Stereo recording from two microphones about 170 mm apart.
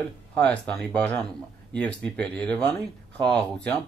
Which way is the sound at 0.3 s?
5° left (ahead or behind).